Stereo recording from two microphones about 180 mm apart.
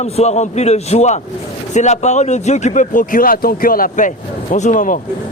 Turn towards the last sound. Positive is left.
turn(degrees=45)  # may be behind; listen again after turning